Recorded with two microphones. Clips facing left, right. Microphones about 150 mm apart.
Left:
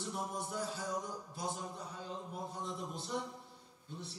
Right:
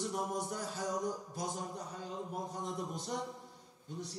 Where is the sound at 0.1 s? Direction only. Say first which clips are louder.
Right 3 dB; 45° right (ahead or behind).